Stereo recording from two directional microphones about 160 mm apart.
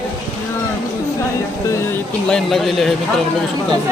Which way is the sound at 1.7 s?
10° left (ahead or behind).